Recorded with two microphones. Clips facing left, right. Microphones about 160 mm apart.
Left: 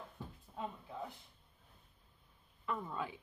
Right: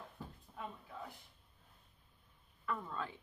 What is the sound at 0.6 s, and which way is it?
Speech, 25° left (ahead or behind).